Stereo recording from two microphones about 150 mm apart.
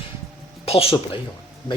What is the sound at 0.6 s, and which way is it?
Speech, 40° left (ahead or behind).